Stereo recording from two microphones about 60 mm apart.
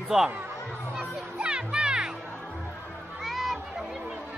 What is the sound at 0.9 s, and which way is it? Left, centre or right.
Music, centre.